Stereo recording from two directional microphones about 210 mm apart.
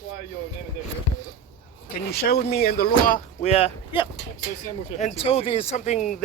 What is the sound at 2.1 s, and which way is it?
Speech, 50° left (ahead or behind).